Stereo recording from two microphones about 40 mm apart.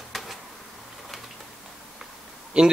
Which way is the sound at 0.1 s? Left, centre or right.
Centre.